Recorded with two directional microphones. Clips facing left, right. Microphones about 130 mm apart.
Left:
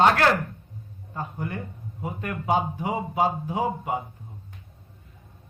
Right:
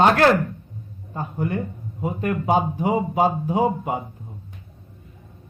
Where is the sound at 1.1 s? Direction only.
30° right (ahead or behind).